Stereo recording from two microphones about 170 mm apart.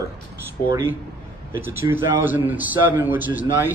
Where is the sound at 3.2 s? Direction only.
50° left (ahead or behind).